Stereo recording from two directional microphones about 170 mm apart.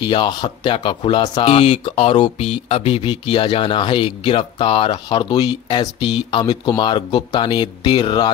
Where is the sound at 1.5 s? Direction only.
40° left (ahead or behind).